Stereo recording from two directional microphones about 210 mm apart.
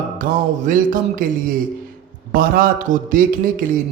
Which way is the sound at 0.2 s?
40° right (ahead or behind).